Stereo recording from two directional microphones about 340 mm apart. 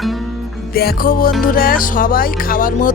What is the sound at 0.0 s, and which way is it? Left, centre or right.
Music, centre.